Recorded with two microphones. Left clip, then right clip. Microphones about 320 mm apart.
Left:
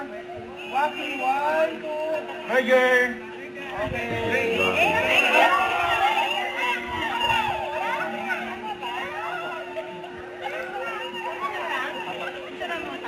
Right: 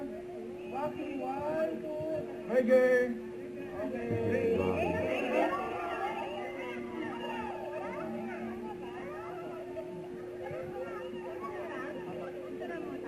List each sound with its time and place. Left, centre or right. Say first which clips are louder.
0.7 s speech: left 13 dB; centre
2.5 s music: left 7 dB; centre
4.8 s a sound: left 13 dB; centre
11.5 s chatter: left 11 dB; centre